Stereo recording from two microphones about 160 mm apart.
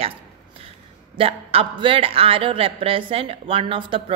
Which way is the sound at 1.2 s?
35° right (ahead or behind).